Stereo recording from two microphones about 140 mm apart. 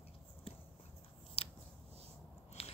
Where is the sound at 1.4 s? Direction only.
45° left (ahead or behind).